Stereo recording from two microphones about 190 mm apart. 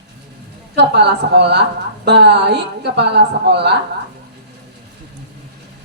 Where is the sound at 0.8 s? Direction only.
60° right (ahead or behind).